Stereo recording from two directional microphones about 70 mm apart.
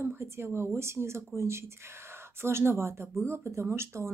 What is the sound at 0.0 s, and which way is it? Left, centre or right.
A woman's voice, right.